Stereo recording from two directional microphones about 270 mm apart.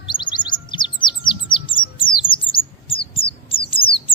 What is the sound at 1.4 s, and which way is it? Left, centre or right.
Bird, centre.